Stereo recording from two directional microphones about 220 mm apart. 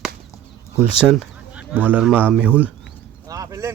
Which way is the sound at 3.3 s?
15° right (ahead or behind).